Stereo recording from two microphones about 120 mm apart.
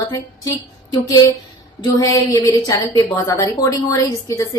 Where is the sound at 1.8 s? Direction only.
30° left (ahead or behind).